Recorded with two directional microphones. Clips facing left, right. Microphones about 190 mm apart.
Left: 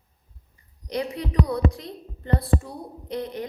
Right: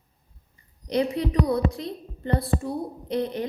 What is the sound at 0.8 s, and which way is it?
A woman's voice, 25° right (ahead or behind).